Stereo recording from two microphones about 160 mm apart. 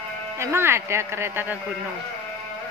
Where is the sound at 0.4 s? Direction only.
15° right (ahead or behind).